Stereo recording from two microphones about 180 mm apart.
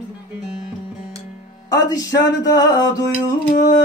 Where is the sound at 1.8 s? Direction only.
20° left (ahead or behind).